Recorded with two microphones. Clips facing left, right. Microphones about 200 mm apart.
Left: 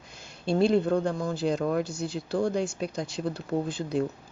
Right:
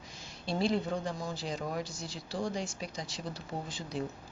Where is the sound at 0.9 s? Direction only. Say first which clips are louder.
Left 9 dB; 60° left (ahead or behind).